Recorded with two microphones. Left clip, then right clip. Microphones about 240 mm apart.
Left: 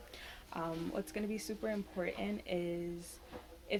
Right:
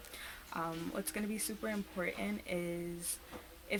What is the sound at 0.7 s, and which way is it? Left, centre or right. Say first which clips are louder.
Speech: left 1 dB; right.